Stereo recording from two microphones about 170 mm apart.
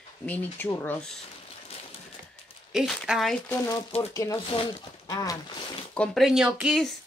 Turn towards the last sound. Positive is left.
turn(degrees=0)  # may be behind; listen again after turning